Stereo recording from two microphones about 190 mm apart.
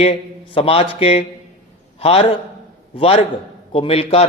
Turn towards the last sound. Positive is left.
turn(degrees=30)  # may be behind; listen again after turning